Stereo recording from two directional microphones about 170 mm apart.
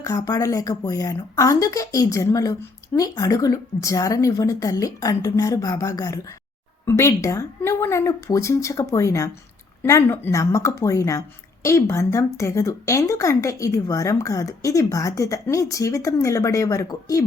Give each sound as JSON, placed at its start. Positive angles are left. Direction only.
{"t": 0.0, "sound": "speech", "side_deg": 20}